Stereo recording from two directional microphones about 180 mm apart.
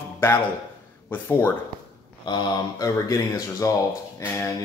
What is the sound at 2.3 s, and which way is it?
Speech, 25° left (ahead or behind).